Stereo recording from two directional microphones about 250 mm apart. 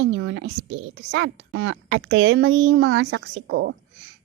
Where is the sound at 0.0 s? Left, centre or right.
Right.